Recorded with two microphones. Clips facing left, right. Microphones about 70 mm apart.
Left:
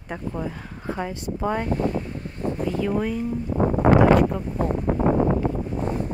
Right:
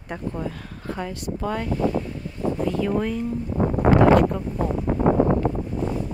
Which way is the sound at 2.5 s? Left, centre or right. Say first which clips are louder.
Right 1 dB; centre.